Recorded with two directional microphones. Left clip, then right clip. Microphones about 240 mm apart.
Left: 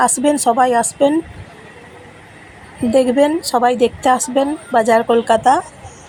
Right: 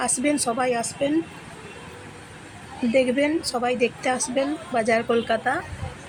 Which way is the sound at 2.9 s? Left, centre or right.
Centre.